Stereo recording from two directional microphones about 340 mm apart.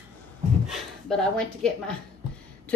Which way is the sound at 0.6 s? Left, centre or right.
Centre.